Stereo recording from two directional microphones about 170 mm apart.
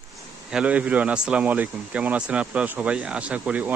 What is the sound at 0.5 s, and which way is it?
Speech, 5° right (ahead or behind).